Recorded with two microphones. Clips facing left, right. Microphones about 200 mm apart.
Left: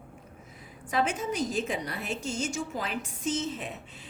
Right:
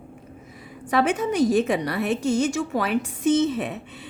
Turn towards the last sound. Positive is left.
turn(degrees=-65)  # may be behind; listen again after turning